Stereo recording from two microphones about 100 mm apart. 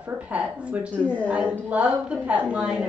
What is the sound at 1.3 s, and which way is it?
A woman's voice, 15° right (ahead or behind).